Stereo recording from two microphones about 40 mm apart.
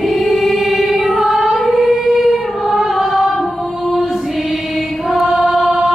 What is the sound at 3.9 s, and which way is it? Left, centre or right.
Choir, centre.